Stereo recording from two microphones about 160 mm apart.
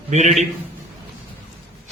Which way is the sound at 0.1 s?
45° right (ahead or behind).